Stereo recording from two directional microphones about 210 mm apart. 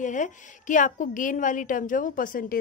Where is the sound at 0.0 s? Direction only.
35° left (ahead or behind).